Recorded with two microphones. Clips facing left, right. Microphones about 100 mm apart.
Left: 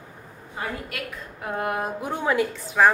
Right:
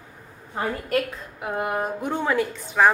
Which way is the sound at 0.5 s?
40° right (ahead or behind).